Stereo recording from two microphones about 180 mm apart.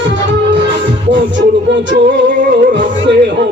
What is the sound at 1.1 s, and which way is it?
Music, 90° right.